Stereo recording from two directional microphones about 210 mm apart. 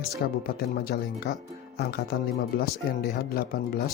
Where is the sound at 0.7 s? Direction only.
45° left (ahead or behind).